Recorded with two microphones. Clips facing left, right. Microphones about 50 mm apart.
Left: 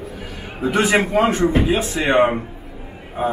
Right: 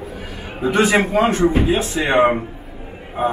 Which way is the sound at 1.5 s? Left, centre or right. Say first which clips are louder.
Even; left.